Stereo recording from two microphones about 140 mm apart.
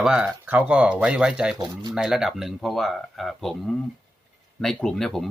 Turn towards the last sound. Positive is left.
turn(degrees=0)  # may be behind; listen again after turning